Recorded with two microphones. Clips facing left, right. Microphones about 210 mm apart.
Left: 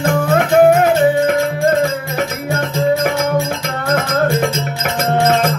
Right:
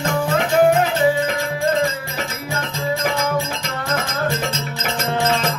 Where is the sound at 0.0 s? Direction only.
55° left (ahead or behind).